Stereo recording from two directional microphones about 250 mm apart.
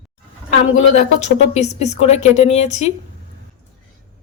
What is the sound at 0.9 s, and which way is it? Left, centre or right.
Speech, left.